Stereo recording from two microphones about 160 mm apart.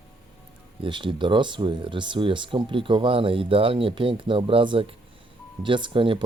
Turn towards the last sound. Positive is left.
turn(degrees=-30)  # may be behind; listen again after turning